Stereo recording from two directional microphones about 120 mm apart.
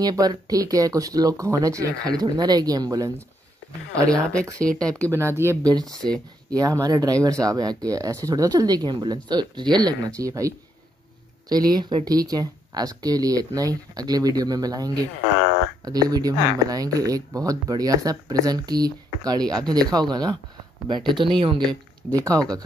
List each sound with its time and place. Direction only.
0.0 s speech: 30° right (ahead or behind)
4.1 s speech: 10° left (ahead or behind)
5.1 s speech: 20° right (ahead or behind)
5.7 s speech: 30° right (ahead or behind)